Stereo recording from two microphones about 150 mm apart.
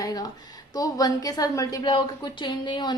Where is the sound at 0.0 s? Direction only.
25° left (ahead or behind).